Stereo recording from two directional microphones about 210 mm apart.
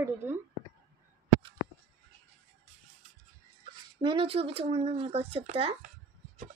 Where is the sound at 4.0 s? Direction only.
25° right (ahead or behind).